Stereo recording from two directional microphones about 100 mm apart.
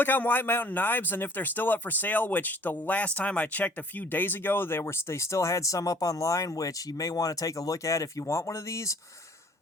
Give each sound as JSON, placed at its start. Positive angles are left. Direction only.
{"t": 0.0, "sound": "a man's voice", "side_deg": 20}